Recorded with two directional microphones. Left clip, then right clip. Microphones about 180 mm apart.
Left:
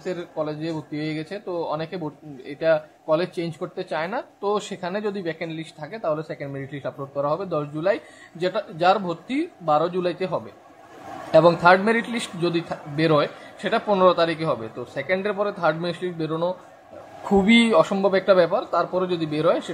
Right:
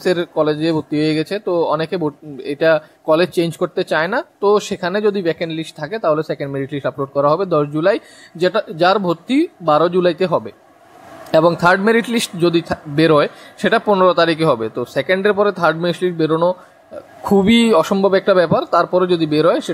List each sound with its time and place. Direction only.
0.0 s speech: 45° right (ahead or behind)